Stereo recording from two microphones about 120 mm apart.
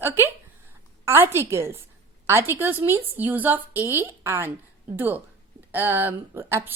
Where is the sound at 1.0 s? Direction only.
20° right (ahead or behind).